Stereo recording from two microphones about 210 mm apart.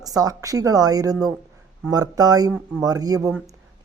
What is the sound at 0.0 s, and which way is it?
Speech, 15° right (ahead or behind).